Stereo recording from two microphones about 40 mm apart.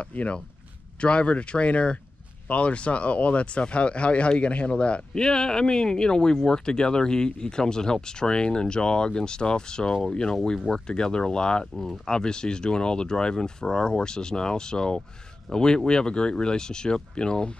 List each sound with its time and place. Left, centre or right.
0.0 s speech: left
11.7 s speech: centre
12.1 s speech: centre